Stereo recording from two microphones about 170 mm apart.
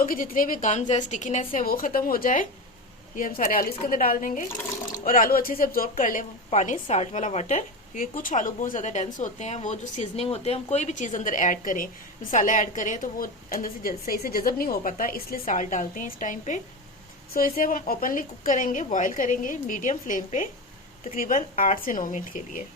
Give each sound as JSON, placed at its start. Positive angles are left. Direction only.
{"t": 0.0, "sound": "a woman's voice", "side_deg": 55}